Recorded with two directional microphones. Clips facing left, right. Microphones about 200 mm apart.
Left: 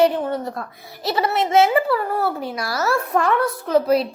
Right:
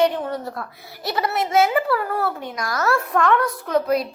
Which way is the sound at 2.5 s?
10° left (ahead or behind).